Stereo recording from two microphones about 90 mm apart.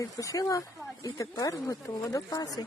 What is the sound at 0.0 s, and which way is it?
A woman's voice, 40° left (ahead or behind).